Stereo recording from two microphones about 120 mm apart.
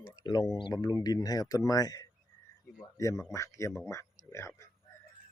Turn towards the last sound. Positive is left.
turn(degrees=25)  # may be behind; listen again after turning